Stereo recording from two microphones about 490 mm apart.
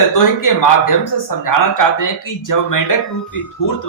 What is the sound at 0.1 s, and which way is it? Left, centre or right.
Speech, left.